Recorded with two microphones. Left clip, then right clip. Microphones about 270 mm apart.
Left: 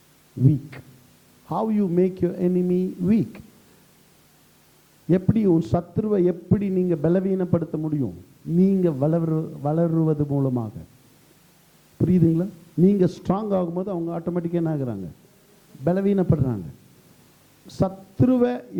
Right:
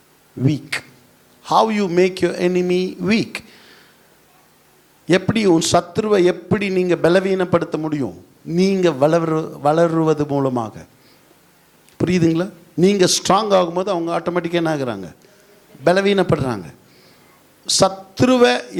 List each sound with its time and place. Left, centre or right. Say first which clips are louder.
0.4 s a man's voice: right 5 dB; centre
5.0 s a man's voice: right 6 dB; centre
11.9 s a man's voice: right 5 dB; centre